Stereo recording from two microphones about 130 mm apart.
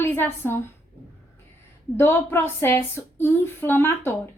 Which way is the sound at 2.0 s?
15° left (ahead or behind).